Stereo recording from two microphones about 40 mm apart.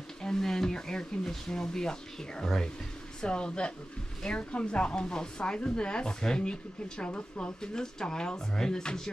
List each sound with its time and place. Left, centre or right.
0.2 s a woman's voice: centre